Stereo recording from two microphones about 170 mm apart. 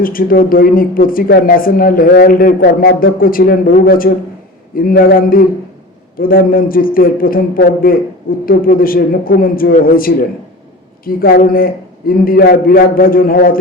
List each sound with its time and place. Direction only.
0.0 s speech: 55° left (ahead or behind)